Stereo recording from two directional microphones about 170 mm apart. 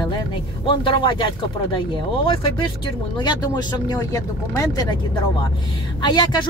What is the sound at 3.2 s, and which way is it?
Speech, 25° left (ahead or behind).